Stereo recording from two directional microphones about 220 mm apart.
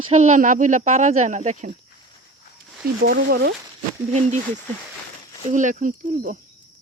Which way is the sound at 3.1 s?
45° right (ahead or behind).